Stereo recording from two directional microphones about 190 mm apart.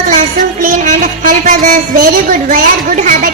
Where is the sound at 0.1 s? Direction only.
45° right (ahead or behind).